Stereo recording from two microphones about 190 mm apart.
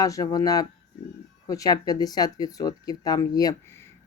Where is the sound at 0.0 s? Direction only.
20° left (ahead or behind).